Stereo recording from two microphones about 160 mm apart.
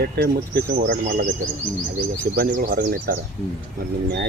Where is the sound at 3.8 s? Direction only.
75° right (ahead or behind).